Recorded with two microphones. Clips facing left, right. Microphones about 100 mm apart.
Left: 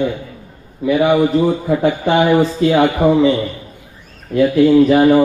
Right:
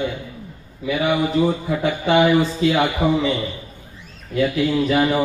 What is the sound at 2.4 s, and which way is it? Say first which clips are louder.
Speech: left 5 dB; 40° left (ahead or behind).